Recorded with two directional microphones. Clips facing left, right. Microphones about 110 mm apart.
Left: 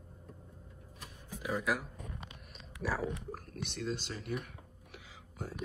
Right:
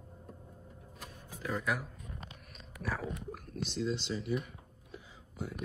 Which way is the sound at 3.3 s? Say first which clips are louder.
Right 1 dB; 40° left (ahead or behind).